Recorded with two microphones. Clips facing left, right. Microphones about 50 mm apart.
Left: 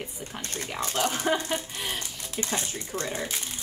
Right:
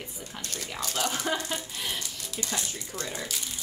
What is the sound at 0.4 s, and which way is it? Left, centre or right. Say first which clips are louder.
Speech: left 2 dB; left.